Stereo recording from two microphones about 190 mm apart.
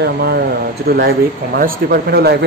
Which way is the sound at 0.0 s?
55° right (ahead or behind).